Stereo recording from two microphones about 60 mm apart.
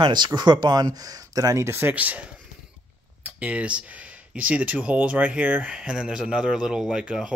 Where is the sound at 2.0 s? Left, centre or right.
Right.